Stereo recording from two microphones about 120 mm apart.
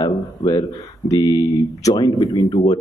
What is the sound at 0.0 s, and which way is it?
Speech, 35° left (ahead or behind).